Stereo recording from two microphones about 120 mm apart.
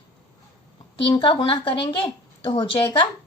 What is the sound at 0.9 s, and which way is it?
A woman's voice, 45° left (ahead or behind).